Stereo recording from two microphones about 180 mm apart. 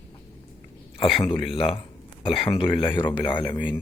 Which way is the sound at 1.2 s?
30° left (ahead or behind).